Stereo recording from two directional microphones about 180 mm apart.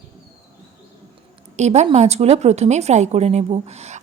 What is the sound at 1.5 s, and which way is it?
A woman's voice, 40° right (ahead or behind).